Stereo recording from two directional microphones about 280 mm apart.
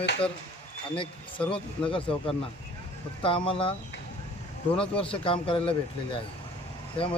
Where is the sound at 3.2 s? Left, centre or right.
Centre.